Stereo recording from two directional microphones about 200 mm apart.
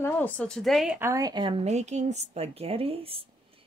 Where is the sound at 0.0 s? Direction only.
10° left (ahead or behind).